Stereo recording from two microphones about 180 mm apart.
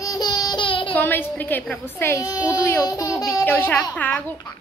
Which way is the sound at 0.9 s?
10° left (ahead or behind).